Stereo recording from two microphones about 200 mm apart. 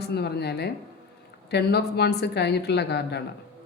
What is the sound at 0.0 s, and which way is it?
A woman's voice, 55° left (ahead or behind).